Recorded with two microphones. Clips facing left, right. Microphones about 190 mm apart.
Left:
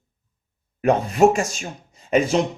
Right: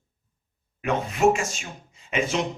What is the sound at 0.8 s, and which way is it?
Speech, 40° left (ahead or behind).